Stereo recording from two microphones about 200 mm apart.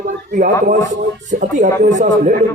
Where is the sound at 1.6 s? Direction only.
35° right (ahead or behind).